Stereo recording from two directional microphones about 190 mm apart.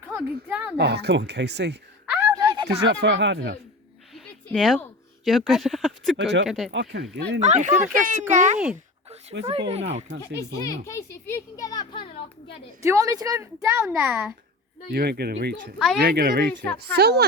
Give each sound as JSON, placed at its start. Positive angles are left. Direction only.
{"t": 0.2, "sound": "a child's voice", "side_deg": -5}
{"t": 0.8, "sound": "speech", "side_deg": -60}
{"t": 2.0, "sound": "a sound", "side_deg": -15}
{"t": 2.6, "sound": "speech", "side_deg": -65}
{"t": 4.4, "sound": "speech", "side_deg": 5}
{"t": 6.1, "sound": "speech", "side_deg": -70}
{"t": 7.4, "sound": "speech", "side_deg": -35}
{"t": 10.6, "sound": "a child's voice", "side_deg": 15}
{"t": 12.8, "sound": "a child's voice", "side_deg": -15}
{"t": 14.9, "sound": "speech", "side_deg": -55}